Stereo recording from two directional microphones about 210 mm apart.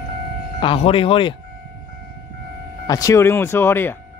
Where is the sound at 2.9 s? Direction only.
15° left (ahead or behind).